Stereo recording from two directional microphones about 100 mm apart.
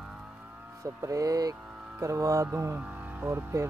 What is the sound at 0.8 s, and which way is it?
Speech, 30° right (ahead or behind).